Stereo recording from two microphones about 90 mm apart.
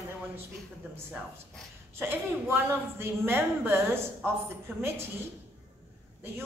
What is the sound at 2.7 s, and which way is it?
A woman's voice, 25° right (ahead or behind).